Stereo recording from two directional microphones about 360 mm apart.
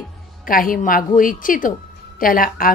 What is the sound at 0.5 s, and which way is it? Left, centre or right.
Speech, left.